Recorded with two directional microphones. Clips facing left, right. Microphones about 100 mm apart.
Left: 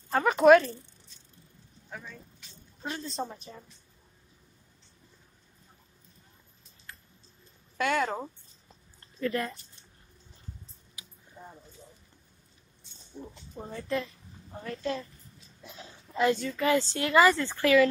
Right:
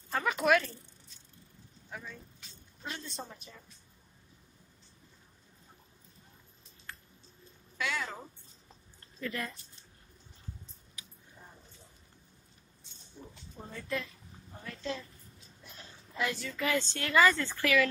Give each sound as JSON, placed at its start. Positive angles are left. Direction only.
{"t": 0.1, "sound": "a woman's voice", "side_deg": 40}
{"t": 1.9, "sound": "vehicle", "side_deg": 0}
{"t": 2.8, "sound": "a woman's voice", "side_deg": 35}
{"t": 7.7, "sound": "a woman's voice", "side_deg": 50}
{"t": 9.2, "sound": "a woman's voice", "side_deg": 35}
{"t": 13.7, "sound": "a woman's voice", "side_deg": 30}
{"t": 14.6, "sound": "a woman's voice", "side_deg": 45}
{"t": 16.2, "sound": "a woman's voice", "side_deg": 35}
{"t": 16.7, "sound": "a woman's voice", "side_deg": 25}